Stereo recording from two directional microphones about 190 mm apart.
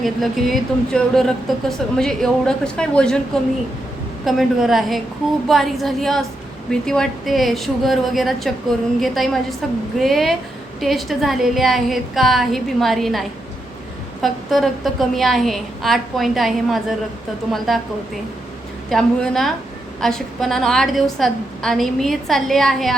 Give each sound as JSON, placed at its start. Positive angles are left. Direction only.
{"t": 0.0, "sound": "a woman's voice", "side_deg": 0}
{"t": 4.3, "sound": "a woman's voice", "side_deg": 0}